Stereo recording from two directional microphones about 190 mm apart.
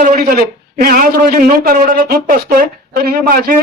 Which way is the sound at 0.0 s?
45° right (ahead or behind).